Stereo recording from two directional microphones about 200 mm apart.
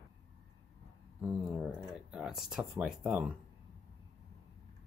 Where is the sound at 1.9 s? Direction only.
Centre (ahead or behind).